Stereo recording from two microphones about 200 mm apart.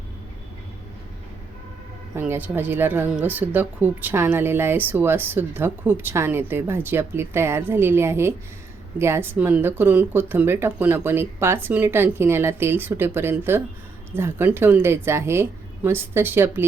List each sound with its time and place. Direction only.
2.1 s a woman's voice: 10° right (ahead or behind)